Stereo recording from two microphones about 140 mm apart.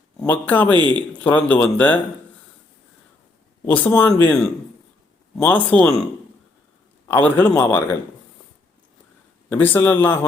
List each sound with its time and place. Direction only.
0.2 s speech: 15° left (ahead or behind)
0.7 s speech: 35° right (ahead or behind)
1.2 s speech: 10° left (ahead or behind)
3.7 s speech: 10° left (ahead or behind)
7.1 s speech: 15° left (ahead or behind)
9.5 s speech: 15° left (ahead or behind)